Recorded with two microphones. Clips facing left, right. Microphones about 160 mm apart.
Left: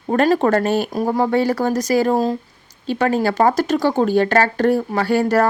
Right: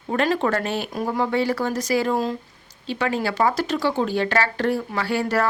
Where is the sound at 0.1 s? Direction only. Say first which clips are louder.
Left 6 dB; 45° left (ahead or behind).